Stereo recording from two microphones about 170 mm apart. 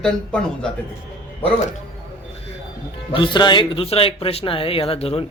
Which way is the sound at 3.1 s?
30° left (ahead or behind).